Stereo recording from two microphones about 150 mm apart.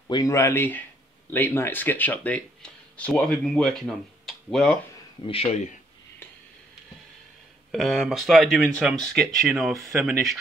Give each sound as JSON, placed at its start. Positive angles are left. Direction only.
{"t": 0.1, "sound": "speech", "side_deg": 20}
{"t": 5.2, "sound": "speech", "side_deg": 40}
{"t": 7.7, "sound": "speech", "side_deg": 0}